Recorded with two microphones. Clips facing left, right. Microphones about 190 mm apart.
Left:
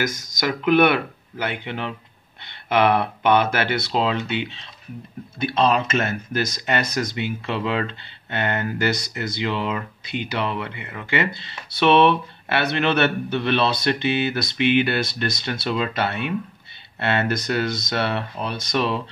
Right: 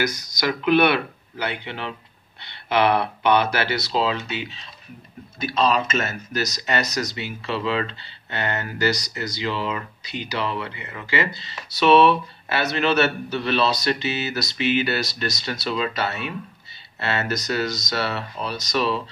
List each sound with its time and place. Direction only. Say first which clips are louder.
0.0 s speech: even; 50° left (ahead or behind)